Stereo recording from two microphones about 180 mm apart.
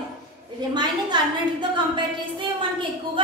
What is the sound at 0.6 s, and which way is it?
A woman's voice, 25° right (ahead or behind).